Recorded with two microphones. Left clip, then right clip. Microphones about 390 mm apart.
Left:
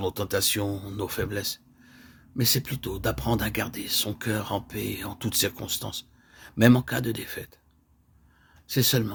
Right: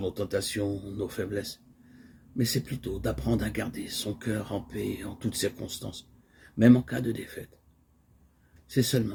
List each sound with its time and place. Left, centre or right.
0.0 s speech: left
2.6 s speech: left
8.7 s speech: left